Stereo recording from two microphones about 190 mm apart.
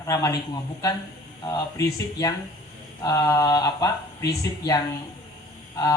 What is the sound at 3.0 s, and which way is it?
Speech, 20° left (ahead or behind).